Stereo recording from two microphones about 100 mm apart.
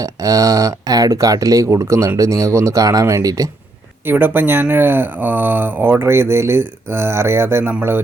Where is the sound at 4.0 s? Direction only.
20° right (ahead or behind).